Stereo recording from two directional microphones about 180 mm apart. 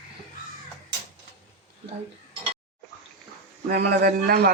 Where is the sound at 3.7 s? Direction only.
60° right (ahead or behind).